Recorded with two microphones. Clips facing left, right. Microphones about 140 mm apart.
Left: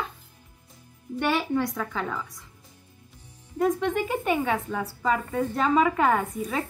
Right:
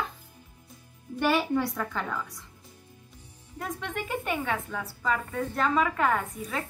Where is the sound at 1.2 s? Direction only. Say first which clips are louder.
Even; centre (ahead or behind).